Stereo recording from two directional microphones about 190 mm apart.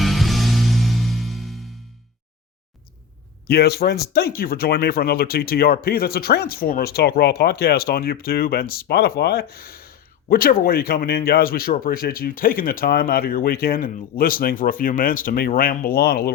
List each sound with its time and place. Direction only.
0.0 s music: centre (ahead or behind)
3.4 s speech: 55° left (ahead or behind)